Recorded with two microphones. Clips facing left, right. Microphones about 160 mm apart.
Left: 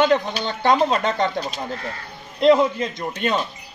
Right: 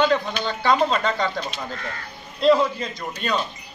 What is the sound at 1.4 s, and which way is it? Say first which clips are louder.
Speech: left 3 dB; 40° left (ahead or behind).